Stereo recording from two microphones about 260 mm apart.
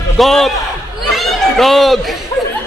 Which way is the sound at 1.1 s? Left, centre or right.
Centre.